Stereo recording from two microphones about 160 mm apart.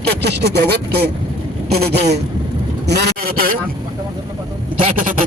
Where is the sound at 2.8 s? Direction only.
90° right; by 3.5 s 70° right (ahead or behind).